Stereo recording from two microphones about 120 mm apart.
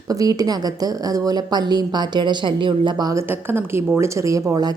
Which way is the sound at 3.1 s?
20° right (ahead or behind).